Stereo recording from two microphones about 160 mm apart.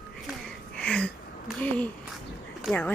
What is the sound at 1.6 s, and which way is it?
Speech, 10° left (ahead or behind).